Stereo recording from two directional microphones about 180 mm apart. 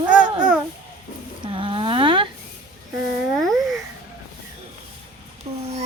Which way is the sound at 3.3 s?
Centre (ahead or behind).